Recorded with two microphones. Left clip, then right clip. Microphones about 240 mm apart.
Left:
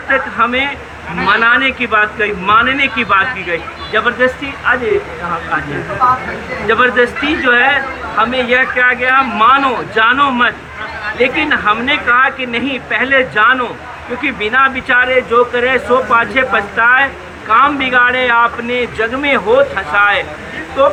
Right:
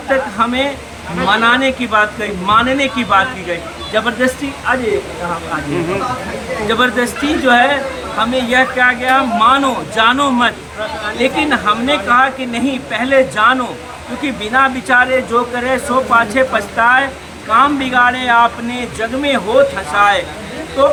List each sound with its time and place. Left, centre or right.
0.1 s speech: centre
6.7 s speech: centre